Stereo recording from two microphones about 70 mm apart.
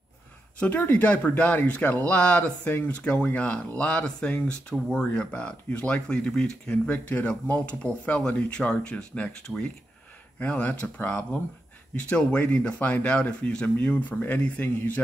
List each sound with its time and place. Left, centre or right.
0.6 s speech: left
10.4 s speech: left